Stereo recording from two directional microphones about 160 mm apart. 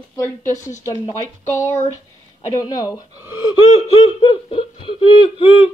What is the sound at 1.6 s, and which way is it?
Speech, 15° left (ahead or behind).